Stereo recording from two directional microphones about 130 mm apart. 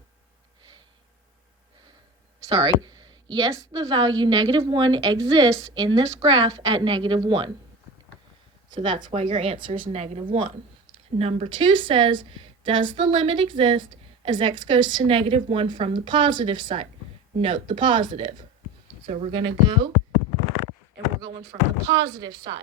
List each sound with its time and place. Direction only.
2.5 s a sound: 30° right (ahead or behind)
3.3 s a woman's voice: 25° right (ahead or behind)
8.7 s a woman's voice: 35° right (ahead or behind)
9.9 s speech: 55° right (ahead or behind)
10.2 s a woman's voice: 40° right (ahead or behind)
11.2 s speech: 50° right (ahead or behind)
11.5 s a woman's voice: 40° right (ahead or behind)
21.8 s speech: 30° right (ahead or behind)